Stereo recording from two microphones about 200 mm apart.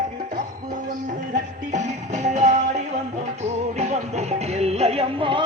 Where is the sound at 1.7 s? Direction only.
35° right (ahead or behind).